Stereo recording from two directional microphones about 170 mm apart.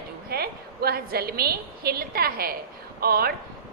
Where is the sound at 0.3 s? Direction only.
65° right (ahead or behind).